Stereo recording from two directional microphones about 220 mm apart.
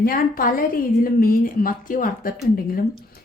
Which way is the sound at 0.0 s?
40° left (ahead or behind).